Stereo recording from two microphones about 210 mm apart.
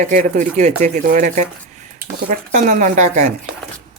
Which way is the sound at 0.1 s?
40° right (ahead or behind).